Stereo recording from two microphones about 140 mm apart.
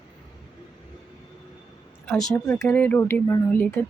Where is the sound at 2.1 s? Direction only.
5° left (ahead or behind).